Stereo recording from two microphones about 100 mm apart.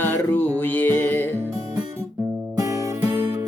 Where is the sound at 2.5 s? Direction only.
35° right (ahead or behind).